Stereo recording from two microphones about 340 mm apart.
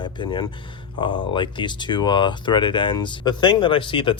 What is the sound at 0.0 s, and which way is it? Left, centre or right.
Speech, centre.